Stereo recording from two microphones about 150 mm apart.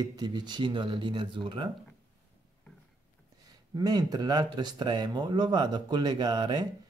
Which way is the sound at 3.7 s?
25° right (ahead or behind).